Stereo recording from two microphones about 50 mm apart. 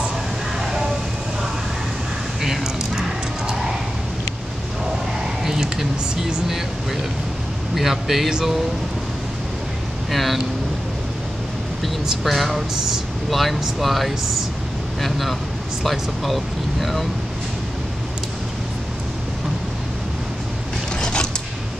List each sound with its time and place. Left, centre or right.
2.4 s a sound: centre
5.2 s a sound: centre
6.5 s speech: centre
10.1 s speech: centre
12.1 s speech: centre
21.0 s creak: centre